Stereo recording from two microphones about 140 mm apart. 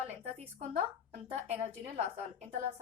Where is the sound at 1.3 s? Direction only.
45° right (ahead or behind).